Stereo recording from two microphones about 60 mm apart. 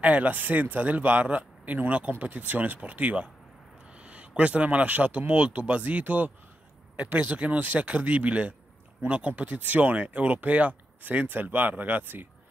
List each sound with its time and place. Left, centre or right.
0.0 s speech: right